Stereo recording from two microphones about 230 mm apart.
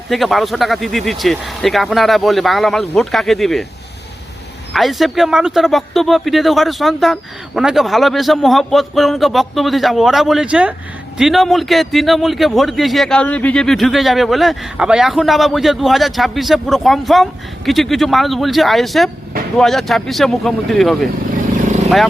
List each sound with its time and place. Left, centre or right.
0.1 s a man's voice: centre
4.7 s a man's voice: centre